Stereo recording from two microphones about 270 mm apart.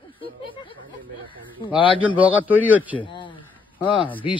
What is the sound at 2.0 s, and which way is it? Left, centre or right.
Speech, centre.